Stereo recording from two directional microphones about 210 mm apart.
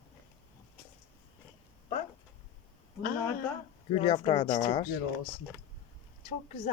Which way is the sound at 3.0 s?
45° left (ahead or behind).